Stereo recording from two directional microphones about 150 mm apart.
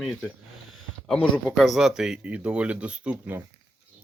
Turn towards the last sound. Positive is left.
turn(degrees=-10)  # may be behind; listen again after turning